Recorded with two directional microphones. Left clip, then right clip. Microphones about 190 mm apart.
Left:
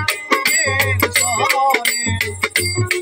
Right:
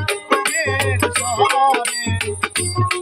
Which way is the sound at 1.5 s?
10° left (ahead or behind).